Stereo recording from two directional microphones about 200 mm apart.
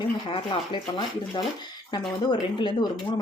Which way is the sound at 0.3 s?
25° left (ahead or behind).